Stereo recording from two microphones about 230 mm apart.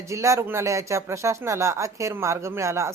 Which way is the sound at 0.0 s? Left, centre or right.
Centre.